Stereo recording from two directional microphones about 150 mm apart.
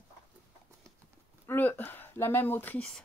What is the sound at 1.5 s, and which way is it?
Speech, 15° left (ahead or behind).